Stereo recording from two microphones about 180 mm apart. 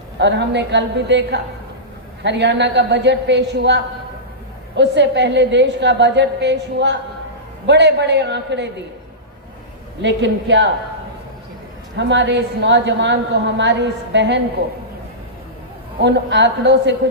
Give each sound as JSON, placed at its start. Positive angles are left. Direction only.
{"t": 0.2, "sound": "a woman's voice", "side_deg": -75}
{"t": 4.8, "sound": "a woman's voice", "side_deg": -75}
{"t": 10.0, "sound": "a woman's voice", "side_deg": -85}
{"t": 11.9, "sound": "a woman's voice", "side_deg": -80}
{"t": 16.0, "sound": "a woman's voice", "side_deg": -75}